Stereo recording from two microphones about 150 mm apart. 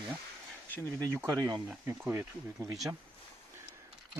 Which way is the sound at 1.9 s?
20° right (ahead or behind).